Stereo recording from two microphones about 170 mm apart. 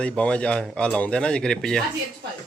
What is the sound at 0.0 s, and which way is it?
Speech, 5° left (ahead or behind).